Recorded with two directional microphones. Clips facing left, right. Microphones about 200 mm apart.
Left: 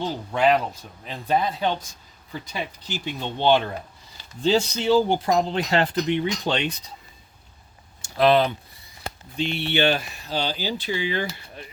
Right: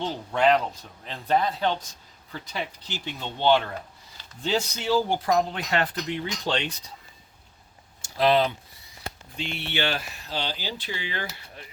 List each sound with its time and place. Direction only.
0.0 s speech: 5° left (ahead or behind)
8.0 s speech: 55° left (ahead or behind)
9.4 s speech: 25° left (ahead or behind)